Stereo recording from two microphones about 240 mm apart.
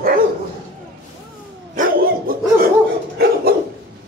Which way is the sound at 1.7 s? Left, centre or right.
Right.